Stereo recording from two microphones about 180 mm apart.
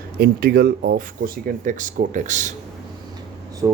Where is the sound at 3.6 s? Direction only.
20° right (ahead or behind).